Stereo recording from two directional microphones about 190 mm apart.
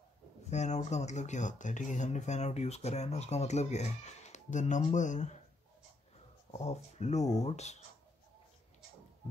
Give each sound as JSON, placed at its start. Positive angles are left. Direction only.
{"t": 0.5, "sound": "speech", "side_deg": 35}
{"t": 6.6, "sound": "speech", "side_deg": 35}